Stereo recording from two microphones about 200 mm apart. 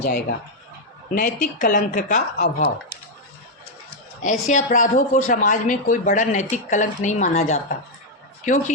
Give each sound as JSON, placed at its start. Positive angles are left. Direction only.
{"t": 0.0, "sound": "speech", "side_deg": 55}
{"t": 1.1, "sound": "speech", "side_deg": 40}
{"t": 3.8, "sound": "speech", "side_deg": 40}